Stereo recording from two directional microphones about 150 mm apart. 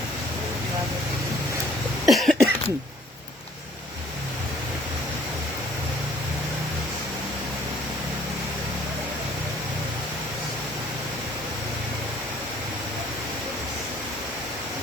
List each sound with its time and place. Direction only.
2.0 s cough: centre (ahead or behind)